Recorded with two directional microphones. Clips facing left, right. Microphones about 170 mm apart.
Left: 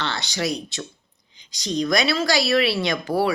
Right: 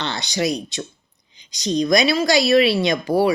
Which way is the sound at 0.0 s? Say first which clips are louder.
Right 3 dB; 20° right (ahead or behind).